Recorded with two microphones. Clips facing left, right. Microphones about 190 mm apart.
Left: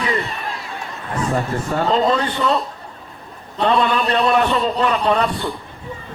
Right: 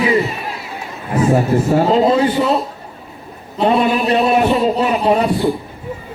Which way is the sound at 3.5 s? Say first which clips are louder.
Right 3 dB; 10° right (ahead or behind).